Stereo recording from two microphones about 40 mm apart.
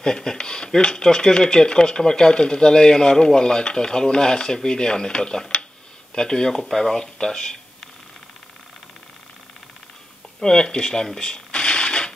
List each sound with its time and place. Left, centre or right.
0.0 s speech: centre
10.4 s speech: centre